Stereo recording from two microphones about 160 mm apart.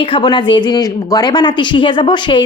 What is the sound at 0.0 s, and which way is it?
Speech, 30° left (ahead or behind).